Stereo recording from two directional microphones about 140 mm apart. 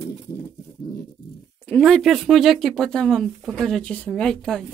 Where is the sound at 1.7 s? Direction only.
Centre (ahead or behind).